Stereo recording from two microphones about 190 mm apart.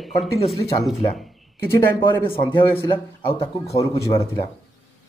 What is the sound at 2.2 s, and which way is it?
Speech, 30° left (ahead or behind).